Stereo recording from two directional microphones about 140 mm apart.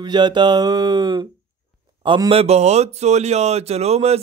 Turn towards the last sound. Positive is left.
turn(degrees=-50)  # may be behind; listen again after turning